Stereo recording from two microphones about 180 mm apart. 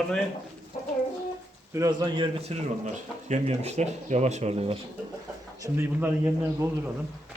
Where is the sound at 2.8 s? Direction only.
40° right (ahead or behind).